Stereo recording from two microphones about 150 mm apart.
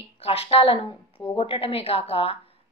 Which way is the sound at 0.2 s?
40° left (ahead or behind).